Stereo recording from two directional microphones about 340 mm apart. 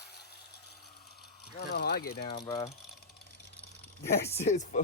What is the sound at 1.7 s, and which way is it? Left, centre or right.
Speech, left.